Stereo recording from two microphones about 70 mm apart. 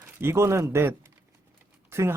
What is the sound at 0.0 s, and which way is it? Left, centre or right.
Speech, right.